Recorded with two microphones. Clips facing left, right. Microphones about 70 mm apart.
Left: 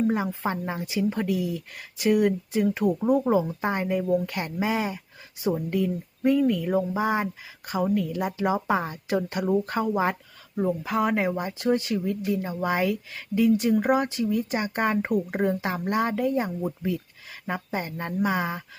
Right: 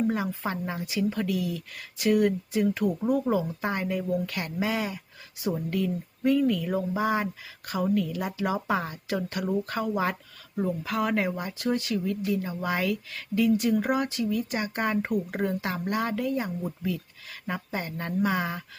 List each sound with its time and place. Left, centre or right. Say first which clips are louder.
0.1 s speech: left 3 dB; centre